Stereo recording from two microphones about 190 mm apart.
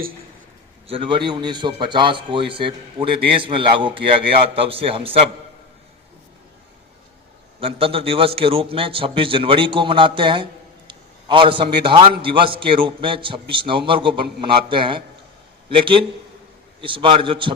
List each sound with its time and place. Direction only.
0.9 s a man's voice: 25° right (ahead or behind)
7.6 s a man's voice: 30° right (ahead or behind)